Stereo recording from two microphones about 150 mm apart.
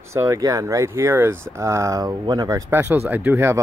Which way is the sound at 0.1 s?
20° right (ahead or behind).